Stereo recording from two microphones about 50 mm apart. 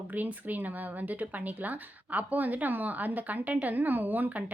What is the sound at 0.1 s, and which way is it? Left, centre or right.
A woman's voice, right.